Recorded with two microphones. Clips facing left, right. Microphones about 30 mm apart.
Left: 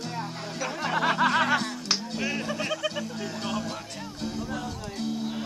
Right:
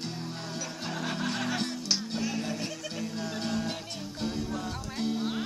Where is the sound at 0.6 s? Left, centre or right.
Left.